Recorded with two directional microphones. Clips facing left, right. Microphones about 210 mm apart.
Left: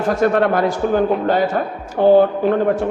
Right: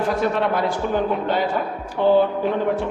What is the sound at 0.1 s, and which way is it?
A man's voice, 50° left (ahead or behind).